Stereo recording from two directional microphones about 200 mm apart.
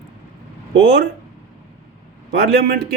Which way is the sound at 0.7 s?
60° right (ahead or behind).